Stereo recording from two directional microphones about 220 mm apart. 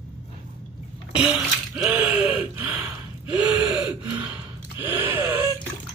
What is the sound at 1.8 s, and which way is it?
Gasp, 5° right (ahead or behind).